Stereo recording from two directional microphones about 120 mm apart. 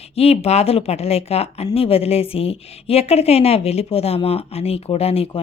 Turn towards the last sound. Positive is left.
turn(degrees=55)  # may be behind; listen again after turning